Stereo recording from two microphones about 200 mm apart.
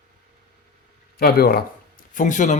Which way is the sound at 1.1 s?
50° left (ahead or behind).